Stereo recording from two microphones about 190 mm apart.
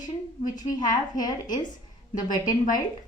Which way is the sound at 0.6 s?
20° left (ahead or behind).